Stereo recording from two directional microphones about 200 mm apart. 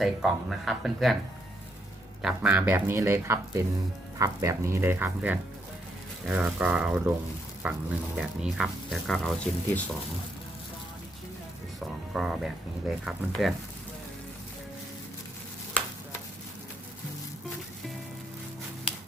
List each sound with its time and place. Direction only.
0.0 s speech: centre (ahead or behind)
2.2 s speech: 5° right (ahead or behind)
12.1 s speech: centre (ahead or behind)